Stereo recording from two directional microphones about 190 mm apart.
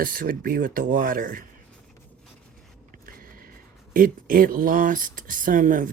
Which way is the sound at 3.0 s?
50° right (ahead or behind).